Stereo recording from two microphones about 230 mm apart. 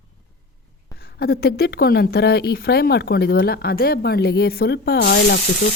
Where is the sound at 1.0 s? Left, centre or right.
Left.